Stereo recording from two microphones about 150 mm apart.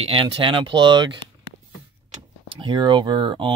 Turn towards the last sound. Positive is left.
turn(degrees=-35)  # may be behind; listen again after turning